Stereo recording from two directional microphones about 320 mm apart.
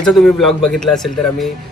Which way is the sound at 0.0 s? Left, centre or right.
Centre.